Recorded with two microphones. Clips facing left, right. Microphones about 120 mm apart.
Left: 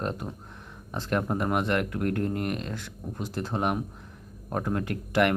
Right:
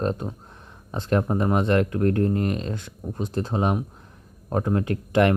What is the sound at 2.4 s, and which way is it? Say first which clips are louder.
Speech: right 4 dB; 25° right (ahead or behind).